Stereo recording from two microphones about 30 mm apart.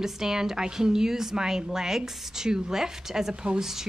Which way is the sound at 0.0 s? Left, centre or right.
Centre.